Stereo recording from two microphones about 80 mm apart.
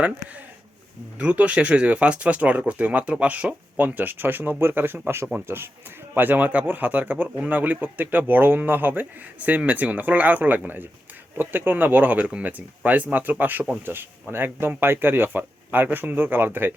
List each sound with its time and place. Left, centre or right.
1.2 s speech: centre